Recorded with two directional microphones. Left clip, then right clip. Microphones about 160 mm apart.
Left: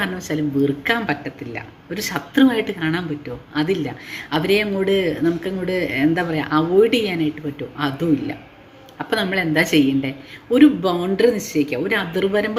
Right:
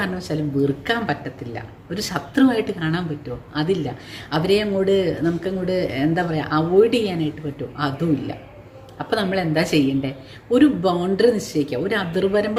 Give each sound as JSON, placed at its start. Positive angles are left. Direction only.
{"t": 0.0, "sound": "a woman's voice", "side_deg": -5}